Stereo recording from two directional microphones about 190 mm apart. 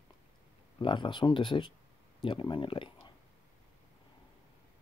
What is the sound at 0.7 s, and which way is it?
Speech, 25° left (ahead or behind).